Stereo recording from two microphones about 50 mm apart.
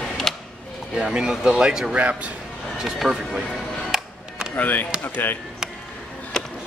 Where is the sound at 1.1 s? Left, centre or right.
Centre.